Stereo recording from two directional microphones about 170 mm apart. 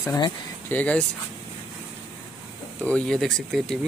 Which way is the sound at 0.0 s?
25° left (ahead or behind).